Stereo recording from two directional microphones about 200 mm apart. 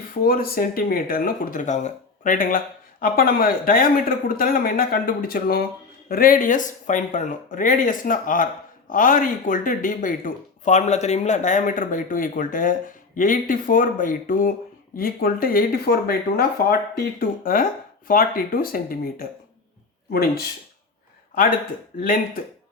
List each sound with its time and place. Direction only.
0.1 s speech: 45° left (ahead or behind)